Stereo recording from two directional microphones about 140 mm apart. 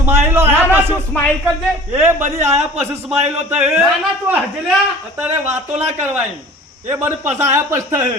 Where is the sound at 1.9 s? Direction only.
15° right (ahead or behind).